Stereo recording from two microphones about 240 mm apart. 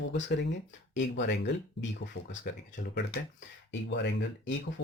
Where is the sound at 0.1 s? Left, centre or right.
Left.